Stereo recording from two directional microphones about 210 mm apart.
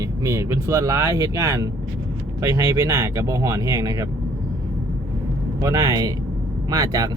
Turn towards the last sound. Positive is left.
turn(degrees=-20)  # may be behind; listen again after turning